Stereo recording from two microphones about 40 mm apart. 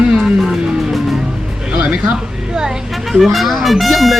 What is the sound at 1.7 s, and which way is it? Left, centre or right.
Music, right.